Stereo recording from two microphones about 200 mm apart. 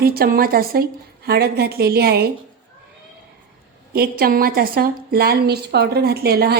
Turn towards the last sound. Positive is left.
turn(degrees=-50)  # may be behind; listen again after turning